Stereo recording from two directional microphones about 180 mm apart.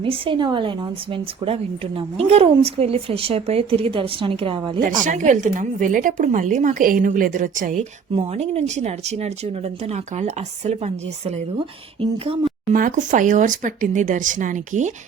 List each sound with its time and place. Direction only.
0.0 s speech: 30° right (ahead or behind)
4.9 s a woman's voice: 45° right (ahead or behind)
8.1 s speech: 35° right (ahead or behind)
12.7 s a woman's voice: 45° right (ahead or behind)